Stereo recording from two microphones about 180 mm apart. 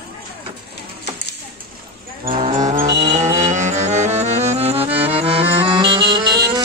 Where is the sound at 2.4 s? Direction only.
40° right (ahead or behind).